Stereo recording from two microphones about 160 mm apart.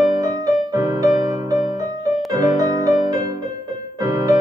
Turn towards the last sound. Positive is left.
turn(degrees=-20)  # may be behind; listen again after turning